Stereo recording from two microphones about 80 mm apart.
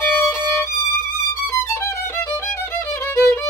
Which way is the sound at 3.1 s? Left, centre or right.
Left.